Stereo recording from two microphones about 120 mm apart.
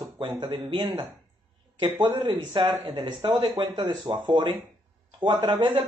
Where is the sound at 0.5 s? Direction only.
40° right (ahead or behind).